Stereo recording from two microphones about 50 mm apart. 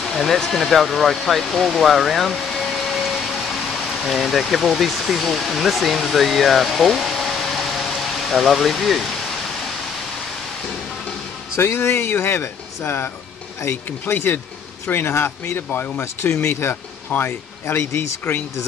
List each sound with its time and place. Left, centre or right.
0.0 s a sound: centre
11.5 s speech: left
15.5 s speech: left
16.0 s speech: left